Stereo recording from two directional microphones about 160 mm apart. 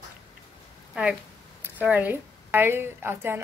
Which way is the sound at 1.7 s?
10° right (ahead or behind).